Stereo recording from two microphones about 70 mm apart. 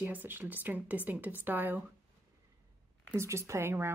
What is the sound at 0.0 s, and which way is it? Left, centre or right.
Speech, right.